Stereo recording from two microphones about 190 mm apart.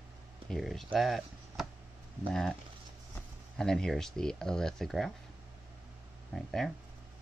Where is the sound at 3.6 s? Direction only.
5° left (ahead or behind).